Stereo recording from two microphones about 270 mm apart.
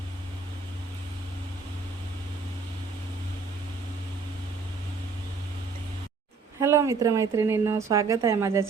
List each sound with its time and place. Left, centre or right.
6.6 s speech: centre